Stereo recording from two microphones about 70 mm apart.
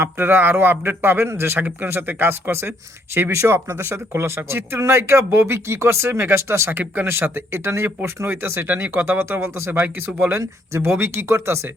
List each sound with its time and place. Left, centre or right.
0.0 s a man's voice: right
6.7 s a man's voice: right